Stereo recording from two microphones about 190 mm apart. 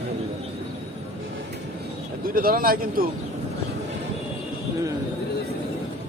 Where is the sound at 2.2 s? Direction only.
50° right (ahead or behind).